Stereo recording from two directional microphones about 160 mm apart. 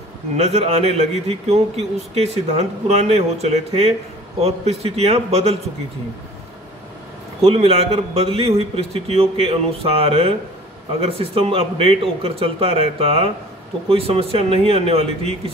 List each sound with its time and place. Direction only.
0.4 s a man's voice: 40° right (ahead or behind)
7.4 s a man's voice: 40° right (ahead or behind)